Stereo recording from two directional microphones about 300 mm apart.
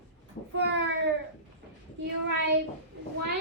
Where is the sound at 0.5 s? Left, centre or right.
Right.